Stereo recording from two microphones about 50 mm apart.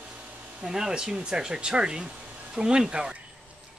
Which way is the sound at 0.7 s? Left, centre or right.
Centre.